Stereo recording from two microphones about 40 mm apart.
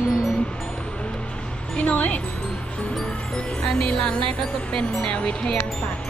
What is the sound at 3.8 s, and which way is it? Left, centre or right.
Speech, left.